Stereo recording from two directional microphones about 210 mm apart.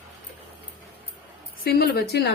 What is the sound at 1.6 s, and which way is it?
Speech, 45° left (ahead or behind).